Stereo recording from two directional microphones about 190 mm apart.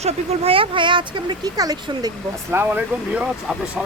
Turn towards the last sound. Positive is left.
turn(degrees=-5)  # may be behind; listen again after turning